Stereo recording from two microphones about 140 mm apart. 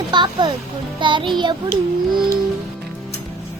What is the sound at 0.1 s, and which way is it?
Speech, 30° right (ahead or behind).